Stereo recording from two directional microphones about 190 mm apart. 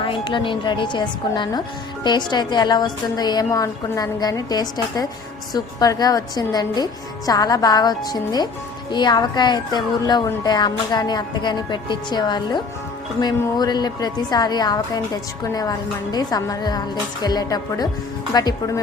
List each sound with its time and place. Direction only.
0.0 s speech: 25° left (ahead or behind)